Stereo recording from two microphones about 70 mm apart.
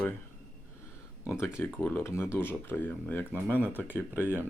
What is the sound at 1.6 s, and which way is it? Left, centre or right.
Speech, left.